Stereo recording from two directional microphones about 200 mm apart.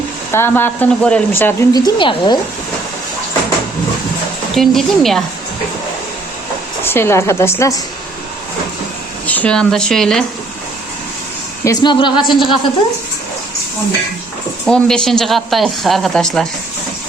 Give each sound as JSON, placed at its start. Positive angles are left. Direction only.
{"t": 0.3, "sound": "speech", "side_deg": 10}
{"t": 4.5, "sound": "speech", "side_deg": 0}
{"t": 6.8, "sound": "speech", "side_deg": 10}
{"t": 9.2, "sound": "speech", "side_deg": 10}
{"t": 11.6, "sound": "speech", "side_deg": 20}
{"t": 14.7, "sound": "speech", "side_deg": 5}